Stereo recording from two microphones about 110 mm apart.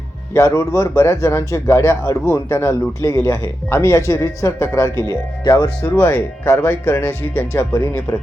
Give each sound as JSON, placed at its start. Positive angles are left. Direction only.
{"t": 0.3, "sound": "speech", "side_deg": 30}